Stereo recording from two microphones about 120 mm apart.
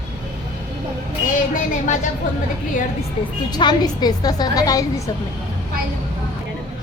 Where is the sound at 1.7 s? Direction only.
90° left.